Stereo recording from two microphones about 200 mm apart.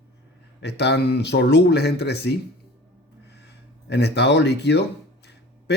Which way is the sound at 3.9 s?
55° left (ahead or behind).